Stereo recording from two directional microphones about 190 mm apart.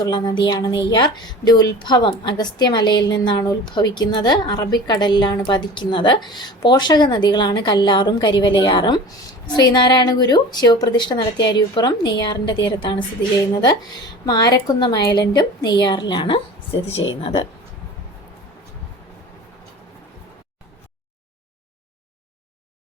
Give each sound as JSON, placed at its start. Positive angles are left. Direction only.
{"t": 0.0, "sound": "a woman's voice", "side_deg": 25}